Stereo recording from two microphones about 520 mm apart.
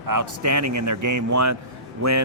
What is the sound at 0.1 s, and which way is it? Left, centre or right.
A man's voice, right.